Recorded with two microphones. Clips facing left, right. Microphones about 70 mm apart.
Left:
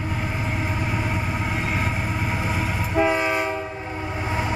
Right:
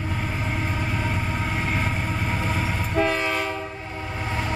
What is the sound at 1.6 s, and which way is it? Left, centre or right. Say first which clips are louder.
Train: left 1 dB; centre.